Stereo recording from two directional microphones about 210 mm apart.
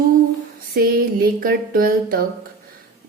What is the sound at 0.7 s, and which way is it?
A woman's voice, 45° right (ahead or behind).